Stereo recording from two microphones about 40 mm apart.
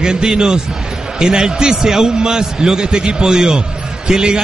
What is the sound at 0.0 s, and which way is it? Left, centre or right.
A man's voice, centre.